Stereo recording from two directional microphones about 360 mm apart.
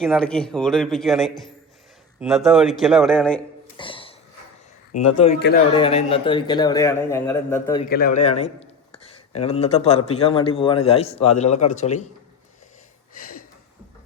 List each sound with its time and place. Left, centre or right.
0.0 s speech: centre
3.8 s a sound: centre
4.9 s a man's voice: centre
7.9 s speech: left
8.9 s a sound: centre
10.1 s a man's voice: centre